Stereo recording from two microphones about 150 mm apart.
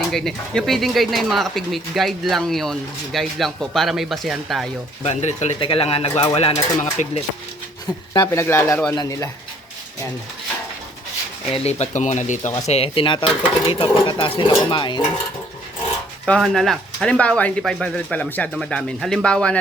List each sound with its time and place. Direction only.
0.1 s speech: centre (ahead or behind)
5.0 s speech: 45° left (ahead or behind)
7.0 s speech: 55° left (ahead or behind)
8.1 s speech: 20° left (ahead or behind)
11.5 s speech: 45° left (ahead or behind)
16.2 s speech: 5° left (ahead or behind)